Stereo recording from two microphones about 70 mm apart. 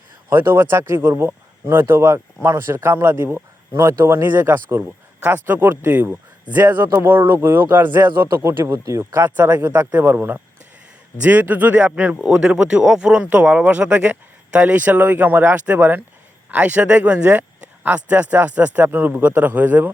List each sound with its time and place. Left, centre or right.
0.3 s a man's voice: right
8.8 s speech: right
9.1 s a man's voice: right